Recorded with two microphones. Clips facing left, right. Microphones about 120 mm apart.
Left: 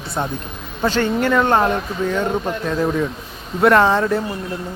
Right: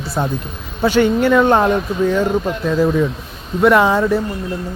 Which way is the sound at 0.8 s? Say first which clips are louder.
Right 5 dB; 15° right (ahead or behind).